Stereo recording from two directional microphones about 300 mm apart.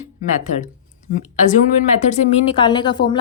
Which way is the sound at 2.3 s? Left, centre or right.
Centre.